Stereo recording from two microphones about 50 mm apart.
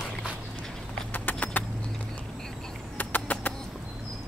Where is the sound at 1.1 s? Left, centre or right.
Left.